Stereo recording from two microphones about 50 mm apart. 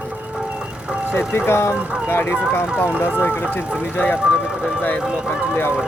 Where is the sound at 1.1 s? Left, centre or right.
Left.